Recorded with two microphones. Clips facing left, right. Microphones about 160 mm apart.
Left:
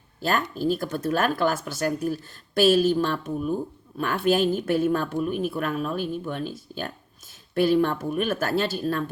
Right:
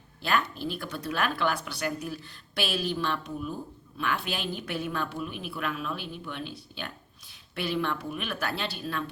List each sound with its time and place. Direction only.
0.2 s a woman's voice: 40° left (ahead or behind)